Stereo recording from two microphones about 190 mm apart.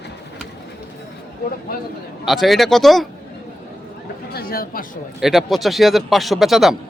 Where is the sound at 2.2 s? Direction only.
Centre (ahead or behind).